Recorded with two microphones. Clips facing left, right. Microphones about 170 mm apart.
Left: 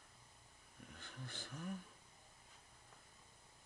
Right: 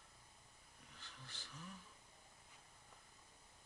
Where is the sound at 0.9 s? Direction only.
50° left (ahead or behind).